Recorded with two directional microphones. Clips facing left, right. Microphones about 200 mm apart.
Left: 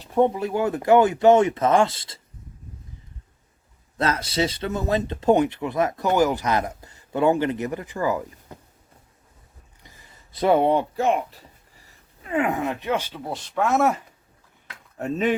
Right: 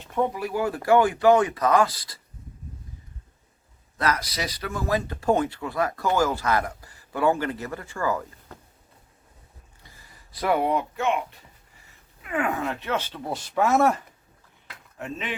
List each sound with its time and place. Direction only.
0.0 s a sound: 35° left (ahead or behind)
0.3 s speech: 25° left (ahead or behind)
3.9 s speech: 25° left (ahead or behind)
9.8 s speech: 20° left (ahead or behind); by 11.3 s 35° left (ahead or behind)
12.2 s speech: 20° left (ahead or behind)
13.3 s speech: centre (ahead or behind)
14.9 s dishes: 40° left (ahead or behind)